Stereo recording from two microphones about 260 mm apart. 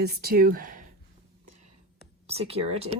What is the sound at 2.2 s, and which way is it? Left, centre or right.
Speech, right.